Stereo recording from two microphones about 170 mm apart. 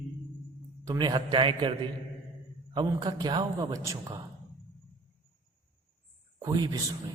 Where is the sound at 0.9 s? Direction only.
25° right (ahead or behind).